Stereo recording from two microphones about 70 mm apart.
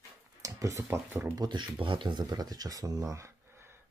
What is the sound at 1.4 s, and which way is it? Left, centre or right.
Speech, right.